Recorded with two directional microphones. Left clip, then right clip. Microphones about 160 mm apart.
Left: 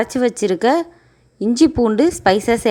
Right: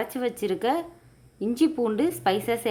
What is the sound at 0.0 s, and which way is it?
A woman's voice, 40° left (ahead or behind).